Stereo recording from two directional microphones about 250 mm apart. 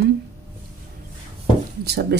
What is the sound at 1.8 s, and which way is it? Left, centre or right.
Speech, right.